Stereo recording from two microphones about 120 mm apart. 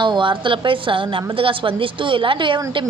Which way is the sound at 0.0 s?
40° right (ahead or behind).